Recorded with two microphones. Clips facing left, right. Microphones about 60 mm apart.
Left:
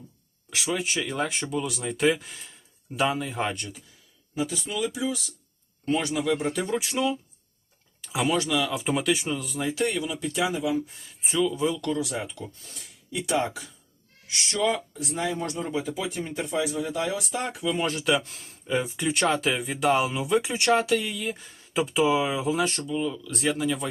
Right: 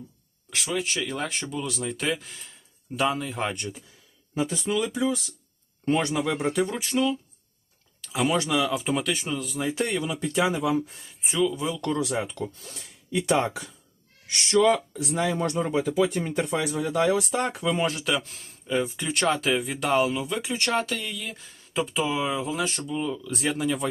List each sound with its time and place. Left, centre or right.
0.5 s speech: centre
4.4 s speech: right
6.1 s speech: right
6.5 s speech: centre
8.4 s speech: right
8.7 s speech: centre
9.7 s speech: right
11.2 s speech: centre
11.9 s speech: right
14.5 s speech: right
16.0 s speech: right
17.5 s speech: right
17.8 s speech: centre